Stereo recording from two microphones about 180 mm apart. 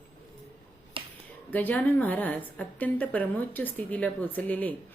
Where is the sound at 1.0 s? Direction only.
30° right (ahead or behind).